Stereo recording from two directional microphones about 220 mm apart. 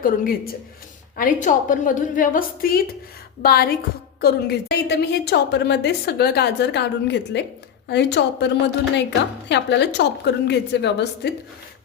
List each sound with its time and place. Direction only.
0.0 s a woman's voice: 40° left (ahead or behind)